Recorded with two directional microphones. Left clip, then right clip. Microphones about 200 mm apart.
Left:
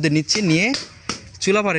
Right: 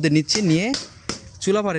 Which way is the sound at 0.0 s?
10° right (ahead or behind).